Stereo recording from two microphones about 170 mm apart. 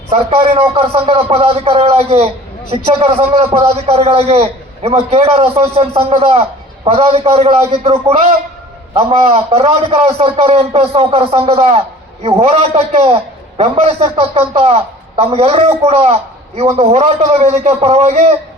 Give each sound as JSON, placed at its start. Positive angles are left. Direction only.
{"t": 0.1, "sound": "speech", "side_deg": -35}
{"t": 8.9, "sound": "a man's voice", "side_deg": -35}